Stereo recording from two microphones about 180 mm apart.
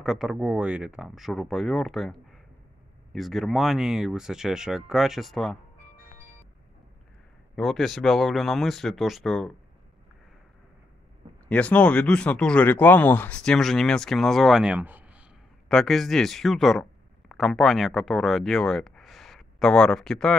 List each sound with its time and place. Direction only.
0.0 s speech: centre (ahead or behind)
7.5 s speech: centre (ahead or behind)
11.4 s speech: 5° left (ahead or behind); by 15.2 s 10° right (ahead or behind)
15.7 s speech: centre (ahead or behind)